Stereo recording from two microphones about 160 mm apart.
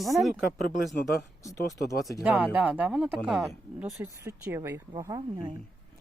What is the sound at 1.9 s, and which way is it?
Speech, 20° left (ahead or behind).